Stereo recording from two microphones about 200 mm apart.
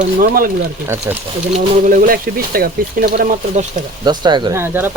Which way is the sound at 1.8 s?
40° right (ahead or behind).